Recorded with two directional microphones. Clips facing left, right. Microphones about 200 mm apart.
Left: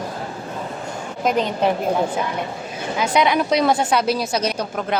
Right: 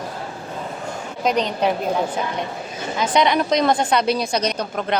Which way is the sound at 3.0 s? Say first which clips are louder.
Even; 5° left (ahead or behind).